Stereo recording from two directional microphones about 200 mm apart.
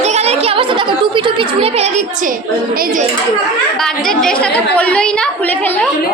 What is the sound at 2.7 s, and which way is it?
Speech, 45° right (ahead or behind).